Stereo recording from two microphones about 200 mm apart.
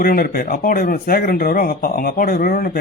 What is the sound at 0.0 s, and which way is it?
A man's voice, 45° left (ahead or behind).